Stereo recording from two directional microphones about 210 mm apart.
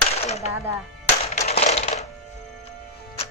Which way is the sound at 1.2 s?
30° left (ahead or behind).